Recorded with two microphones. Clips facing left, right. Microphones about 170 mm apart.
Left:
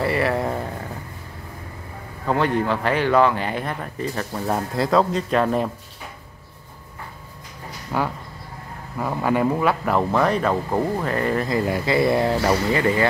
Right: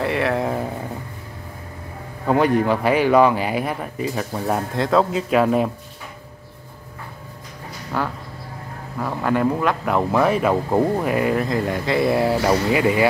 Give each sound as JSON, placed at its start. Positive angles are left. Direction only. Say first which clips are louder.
{"t": 0.0, "sound": "speech", "louder": "right 1 dB", "side_deg": 0}
{"t": 2.2, "sound": "speech", "louder": "right 4 dB", "side_deg": -15}
{"t": 7.9, "sound": "speech", "louder": "left 1 dB", "side_deg": 10}